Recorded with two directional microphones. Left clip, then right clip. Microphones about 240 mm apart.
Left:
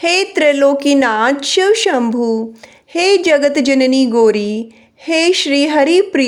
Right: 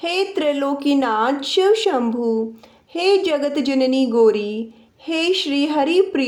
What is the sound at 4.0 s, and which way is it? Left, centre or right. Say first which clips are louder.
Speech: left 4 dB; left.